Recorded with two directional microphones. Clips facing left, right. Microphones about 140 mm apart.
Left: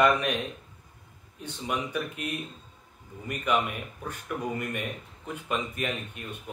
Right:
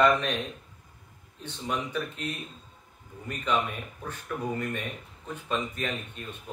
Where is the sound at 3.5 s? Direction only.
10° left (ahead or behind).